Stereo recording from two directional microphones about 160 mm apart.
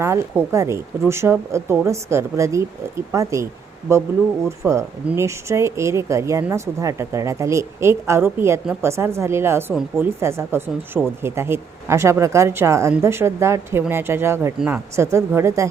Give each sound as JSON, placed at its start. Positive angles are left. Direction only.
{"t": 0.0, "sound": "speech", "side_deg": -15}